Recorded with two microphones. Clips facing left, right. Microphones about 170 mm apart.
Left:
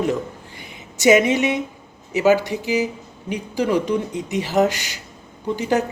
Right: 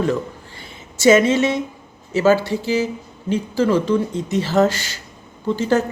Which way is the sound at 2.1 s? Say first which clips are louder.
Right 1 dB; 15° left (ahead or behind).